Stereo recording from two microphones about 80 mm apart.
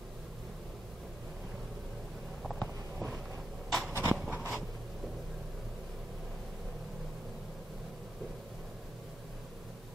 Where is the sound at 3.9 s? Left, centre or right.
Right.